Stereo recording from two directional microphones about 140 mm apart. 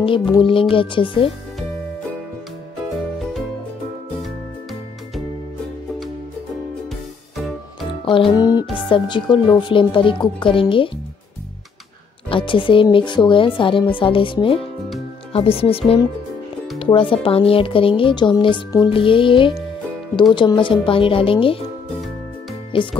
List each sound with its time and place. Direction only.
0.0 s speech: 40° left (ahead or behind)
8.0 s speech: 40° left (ahead or behind)
12.3 s speech: 40° left (ahead or behind)
22.7 s speech: 40° left (ahead or behind)